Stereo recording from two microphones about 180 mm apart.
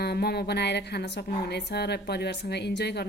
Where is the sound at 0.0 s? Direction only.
60° left (ahead or behind).